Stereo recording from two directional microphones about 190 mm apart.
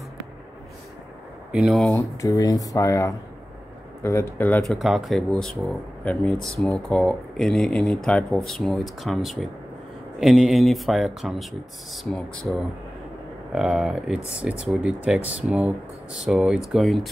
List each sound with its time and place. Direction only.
1.5 s speech: centre (ahead or behind)
4.7 s speech: centre (ahead or behind)